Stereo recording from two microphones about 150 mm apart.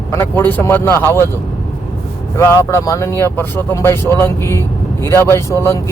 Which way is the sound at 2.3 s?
15° left (ahead or behind).